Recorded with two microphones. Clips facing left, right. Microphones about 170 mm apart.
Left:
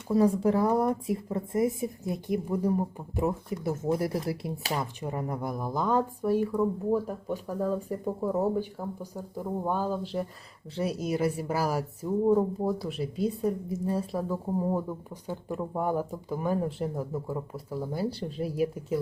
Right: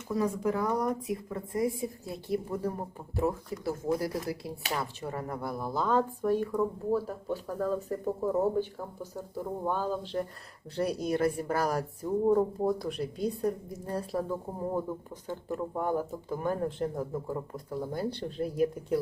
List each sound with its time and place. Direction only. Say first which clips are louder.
0.1 s a woman's voice: left 6 dB; 30° left (ahead or behind); by 18.9 s 5° left (ahead or behind)